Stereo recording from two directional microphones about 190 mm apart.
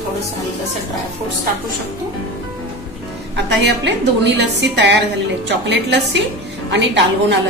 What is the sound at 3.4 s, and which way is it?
A woman's voice, 65° right (ahead or behind).